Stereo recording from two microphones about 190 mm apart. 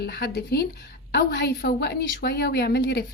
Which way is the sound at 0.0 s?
60° left (ahead or behind).